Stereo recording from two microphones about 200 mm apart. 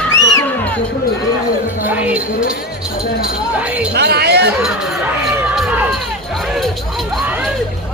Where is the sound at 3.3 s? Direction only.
5° right (ahead or behind).